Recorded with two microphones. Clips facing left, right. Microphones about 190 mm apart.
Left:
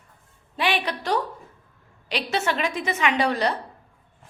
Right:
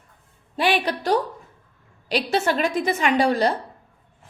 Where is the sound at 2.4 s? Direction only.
40° right (ahead or behind).